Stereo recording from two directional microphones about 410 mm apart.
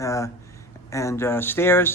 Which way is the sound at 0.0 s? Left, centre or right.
Centre.